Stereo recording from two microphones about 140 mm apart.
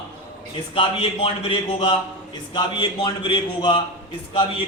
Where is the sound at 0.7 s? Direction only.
40° left (ahead or behind).